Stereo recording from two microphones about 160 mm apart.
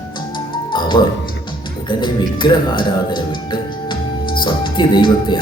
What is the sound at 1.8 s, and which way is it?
Speech, 30° left (ahead or behind).